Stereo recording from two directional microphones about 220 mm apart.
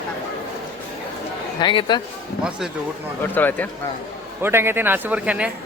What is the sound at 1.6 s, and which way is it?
Speech, 20° left (ahead or behind).